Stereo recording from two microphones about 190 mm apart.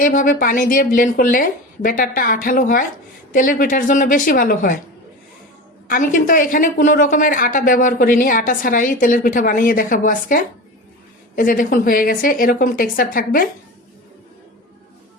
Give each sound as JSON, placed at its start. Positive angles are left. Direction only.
{"t": 0.0, "sound": "a woman's voice", "side_deg": 45}
{"t": 5.9, "sound": "a woman's voice", "side_deg": 45}